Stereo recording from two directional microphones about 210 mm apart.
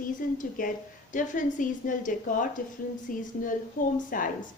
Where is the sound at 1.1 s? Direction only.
35° left (ahead or behind).